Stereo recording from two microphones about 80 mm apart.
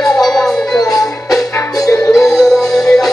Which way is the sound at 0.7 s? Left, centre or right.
Left.